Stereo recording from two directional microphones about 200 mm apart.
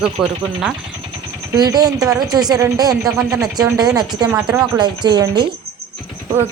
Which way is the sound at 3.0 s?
5° right (ahead or behind).